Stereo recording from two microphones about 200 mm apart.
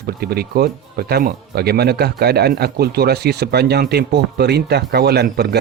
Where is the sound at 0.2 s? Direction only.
50° right (ahead or behind).